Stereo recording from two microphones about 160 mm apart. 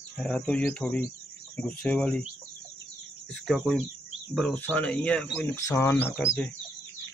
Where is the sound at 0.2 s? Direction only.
5° left (ahead or behind).